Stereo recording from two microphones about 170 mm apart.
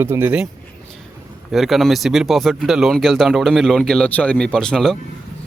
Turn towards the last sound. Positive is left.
turn(degrees=5)  # may be behind; listen again after turning